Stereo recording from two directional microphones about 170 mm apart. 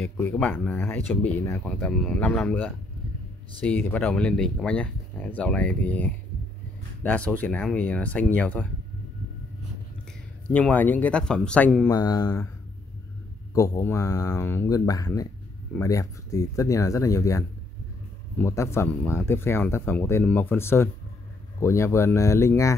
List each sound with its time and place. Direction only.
0.0 s speech: 10° left (ahead or behind)
10.5 s speech: 10° left (ahead or behind)
11.9 s speech: 20° left (ahead or behind)
13.6 s speech: 20° left (ahead or behind)